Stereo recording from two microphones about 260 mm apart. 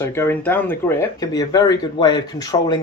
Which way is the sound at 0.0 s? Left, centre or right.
Centre.